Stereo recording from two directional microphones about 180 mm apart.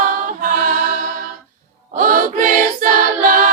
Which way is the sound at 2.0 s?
50° right (ahead or behind).